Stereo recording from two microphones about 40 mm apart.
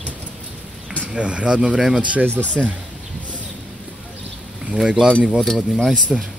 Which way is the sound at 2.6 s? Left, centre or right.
Right.